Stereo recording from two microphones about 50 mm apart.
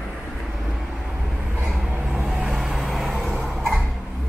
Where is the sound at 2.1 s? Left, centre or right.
Centre.